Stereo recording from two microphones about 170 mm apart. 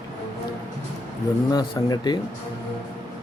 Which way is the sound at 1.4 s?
20° left (ahead or behind).